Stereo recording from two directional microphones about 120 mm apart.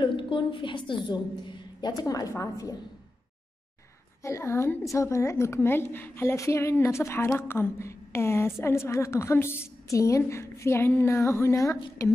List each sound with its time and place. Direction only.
0.0 s a woman's voice: 45° left (ahead or behind); by 2.7 s 25° left (ahead or behind)
4.2 s a woman's voice: 25° left (ahead or behind)